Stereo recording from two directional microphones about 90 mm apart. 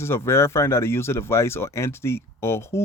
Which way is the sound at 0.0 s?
30° left (ahead or behind).